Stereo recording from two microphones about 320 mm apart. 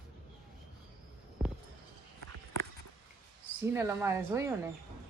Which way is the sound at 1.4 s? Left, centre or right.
Centre.